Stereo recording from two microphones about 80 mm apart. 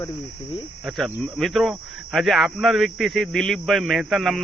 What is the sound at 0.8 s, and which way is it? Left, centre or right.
Speech, centre.